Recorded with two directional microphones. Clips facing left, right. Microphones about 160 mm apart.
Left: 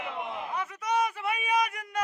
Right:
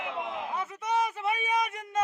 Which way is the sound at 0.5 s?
25° right (ahead or behind).